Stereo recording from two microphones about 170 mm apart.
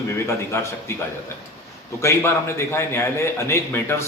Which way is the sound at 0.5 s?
15° left (ahead or behind).